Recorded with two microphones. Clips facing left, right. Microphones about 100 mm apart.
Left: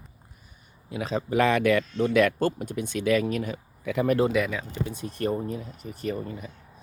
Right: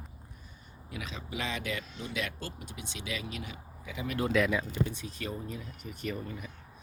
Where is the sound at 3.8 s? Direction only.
65° left (ahead or behind).